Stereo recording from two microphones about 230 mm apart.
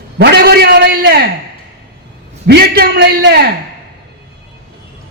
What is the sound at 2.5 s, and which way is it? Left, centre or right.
A man's voice, right.